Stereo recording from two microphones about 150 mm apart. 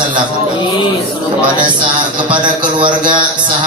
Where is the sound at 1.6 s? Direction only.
30° right (ahead or behind).